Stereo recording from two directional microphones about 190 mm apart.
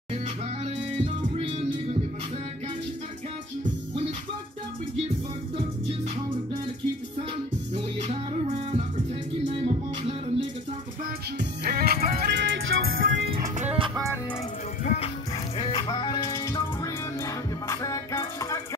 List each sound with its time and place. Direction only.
0.7 s music: 35° right (ahead or behind)
7.7 s music: 35° right (ahead or behind)
11.3 s music: 55° right (ahead or behind)
12.4 s music: 85° right
13.7 s music: 20° right (ahead or behind)
15.5 s music: 25° left (ahead or behind)